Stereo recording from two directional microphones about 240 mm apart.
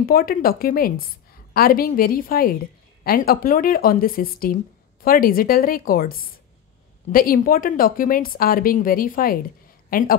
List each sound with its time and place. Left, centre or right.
0.0 s a woman's voice: left